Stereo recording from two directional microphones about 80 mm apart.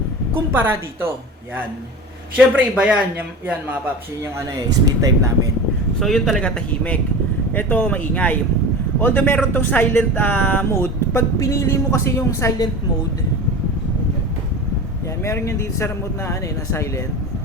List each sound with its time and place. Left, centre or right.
0.3 s a woman's voice: right
2.3 s a man's voice: centre
4.9 s speech: right
6.0 s speech: centre; by 10.8 s left
11.1 s speech: left
15.2 s speech: left